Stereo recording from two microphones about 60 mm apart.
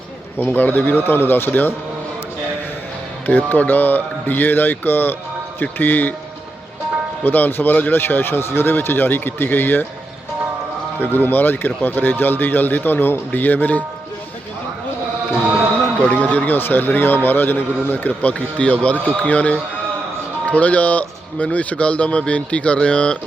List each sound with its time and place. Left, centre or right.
0.3 s speech: left
3.2 s speech: left
7.3 s speech: left
11.0 s speech: left
16.3 s a man's voice: left